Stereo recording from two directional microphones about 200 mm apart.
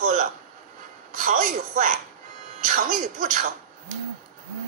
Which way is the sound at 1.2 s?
45° right (ahead or behind).